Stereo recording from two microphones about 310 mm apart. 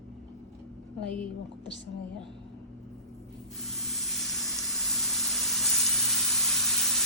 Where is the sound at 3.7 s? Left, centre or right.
Centre.